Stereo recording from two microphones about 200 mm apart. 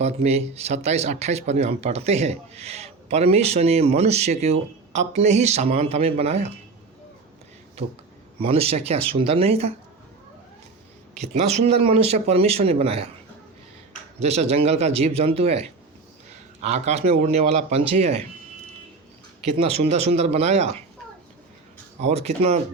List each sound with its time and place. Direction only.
0.0 s speech: 30° right (ahead or behind)
8.4 s speech: 30° right (ahead or behind)
11.1 s speech: 35° right (ahead or behind)
14.2 s speech: 30° right (ahead or behind)
19.5 s speech: 30° right (ahead or behind)
22.0 s speech: 30° right (ahead or behind)